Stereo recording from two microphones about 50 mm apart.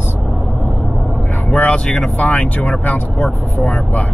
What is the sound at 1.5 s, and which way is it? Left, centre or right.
Speech, left.